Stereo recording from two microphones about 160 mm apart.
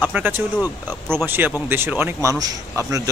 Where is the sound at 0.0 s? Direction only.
10° right (ahead or behind).